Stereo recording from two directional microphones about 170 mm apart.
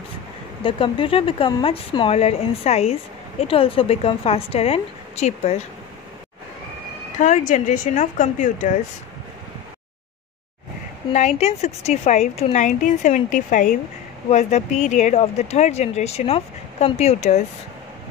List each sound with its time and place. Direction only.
0.7 s speech: 30° left (ahead or behind)
7.2 s speech: 45° left (ahead or behind)
11.1 s speech: 40° left (ahead or behind)